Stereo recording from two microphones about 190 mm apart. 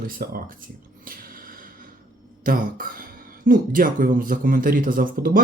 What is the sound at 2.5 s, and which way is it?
Speech, 45° right (ahead or behind).